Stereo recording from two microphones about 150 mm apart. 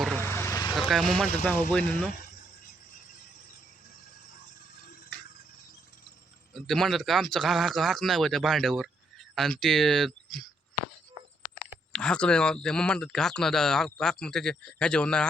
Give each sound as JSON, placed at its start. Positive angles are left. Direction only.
{"t": 0.2, "sound": "vehicle", "side_deg": 15}
{"t": 0.7, "sound": "speech", "side_deg": 0}
{"t": 6.5, "sound": "speech", "side_deg": 0}
{"t": 11.9, "sound": "speech", "side_deg": 5}